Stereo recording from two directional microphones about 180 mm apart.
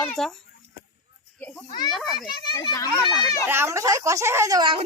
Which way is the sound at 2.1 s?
25° left (ahead or behind).